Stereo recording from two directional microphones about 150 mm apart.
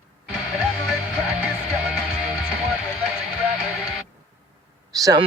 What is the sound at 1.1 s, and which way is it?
Music, 10° right (ahead or behind).